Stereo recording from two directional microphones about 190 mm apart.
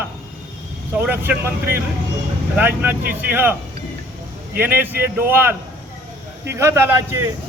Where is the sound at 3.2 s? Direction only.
10° right (ahead or behind).